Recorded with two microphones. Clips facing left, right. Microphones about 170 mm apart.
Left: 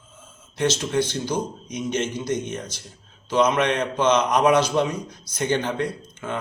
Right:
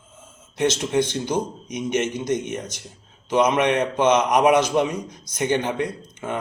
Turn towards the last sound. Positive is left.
turn(degrees=-20)  # may be behind; listen again after turning